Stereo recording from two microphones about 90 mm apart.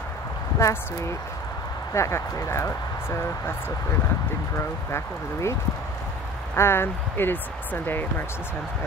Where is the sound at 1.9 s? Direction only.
30° left (ahead or behind).